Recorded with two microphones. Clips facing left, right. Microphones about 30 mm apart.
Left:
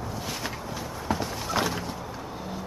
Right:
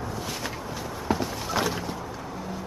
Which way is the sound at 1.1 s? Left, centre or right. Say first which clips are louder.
Right 1 dB; centre.